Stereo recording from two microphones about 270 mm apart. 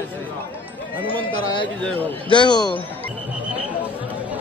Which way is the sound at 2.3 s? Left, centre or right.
Centre.